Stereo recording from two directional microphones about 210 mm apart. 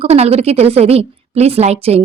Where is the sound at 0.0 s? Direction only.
30° right (ahead or behind).